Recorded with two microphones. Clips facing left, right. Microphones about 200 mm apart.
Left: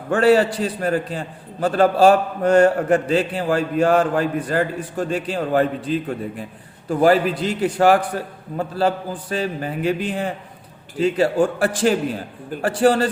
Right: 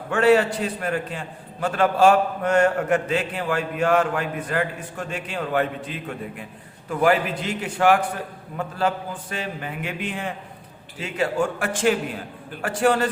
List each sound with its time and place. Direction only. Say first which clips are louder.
0.1 s a man's voice: left 2 dB; 35° left (ahead or behind)